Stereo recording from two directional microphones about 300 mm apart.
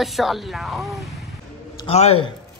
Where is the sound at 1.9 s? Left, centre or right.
Left.